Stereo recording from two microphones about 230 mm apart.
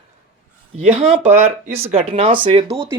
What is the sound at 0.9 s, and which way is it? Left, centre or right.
Speech, right.